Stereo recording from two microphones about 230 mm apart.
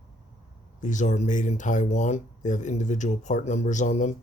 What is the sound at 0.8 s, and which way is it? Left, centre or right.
Speech, left.